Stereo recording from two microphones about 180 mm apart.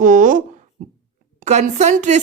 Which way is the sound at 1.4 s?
40° right (ahead or behind).